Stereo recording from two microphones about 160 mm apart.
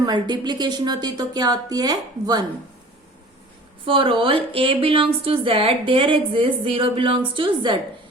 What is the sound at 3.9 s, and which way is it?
A woman's voice, 35° right (ahead or behind).